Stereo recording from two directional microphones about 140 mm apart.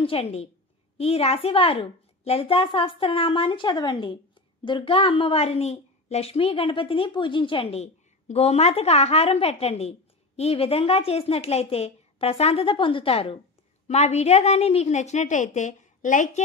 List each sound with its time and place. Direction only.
0.0 s a woman's voice: 45° left (ahead or behind); by 16.4 s 65° left (ahead or behind)